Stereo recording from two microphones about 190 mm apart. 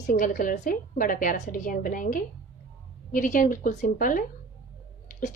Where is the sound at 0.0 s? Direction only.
45° left (ahead or behind).